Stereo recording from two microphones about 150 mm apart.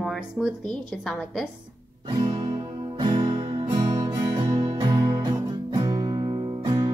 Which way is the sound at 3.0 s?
30° right (ahead or behind).